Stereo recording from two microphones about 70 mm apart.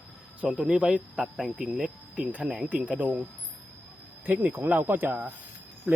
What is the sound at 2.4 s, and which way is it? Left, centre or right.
Speech, centre.